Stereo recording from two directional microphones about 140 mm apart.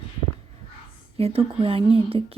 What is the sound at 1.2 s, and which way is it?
Speech, 45° right (ahead or behind).